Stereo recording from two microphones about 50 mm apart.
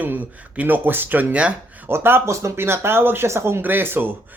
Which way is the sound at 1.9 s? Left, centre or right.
Right.